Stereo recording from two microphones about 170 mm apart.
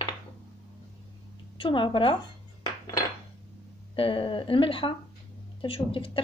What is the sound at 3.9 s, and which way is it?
A woman's voice, 30° left (ahead or behind).